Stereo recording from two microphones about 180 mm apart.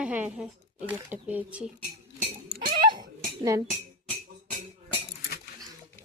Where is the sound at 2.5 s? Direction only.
55° right (ahead or behind).